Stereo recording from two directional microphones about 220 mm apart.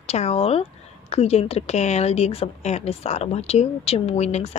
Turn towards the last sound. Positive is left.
turn(degrees=30)  # may be behind; listen again after turning